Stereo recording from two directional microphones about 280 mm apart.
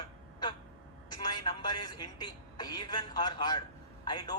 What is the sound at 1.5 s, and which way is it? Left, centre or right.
A man's voice, centre.